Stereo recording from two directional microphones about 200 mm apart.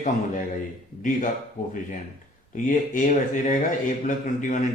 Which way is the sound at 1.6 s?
35° left (ahead or behind).